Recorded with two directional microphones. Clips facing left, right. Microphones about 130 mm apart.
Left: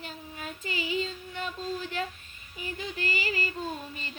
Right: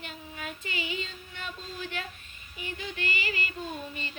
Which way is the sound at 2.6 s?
35° left (ahead or behind).